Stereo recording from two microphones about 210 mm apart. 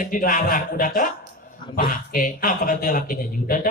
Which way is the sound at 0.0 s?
40° left (ahead or behind).